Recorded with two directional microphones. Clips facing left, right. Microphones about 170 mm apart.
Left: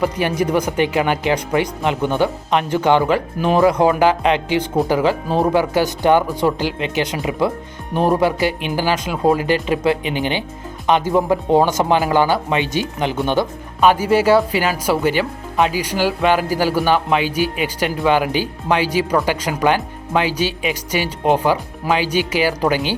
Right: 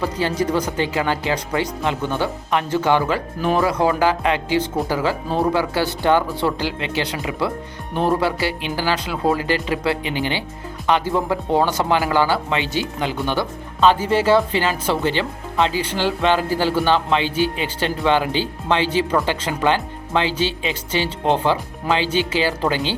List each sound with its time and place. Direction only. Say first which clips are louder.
0.0 s speech: left 3 dB; 15° left (ahead or behind)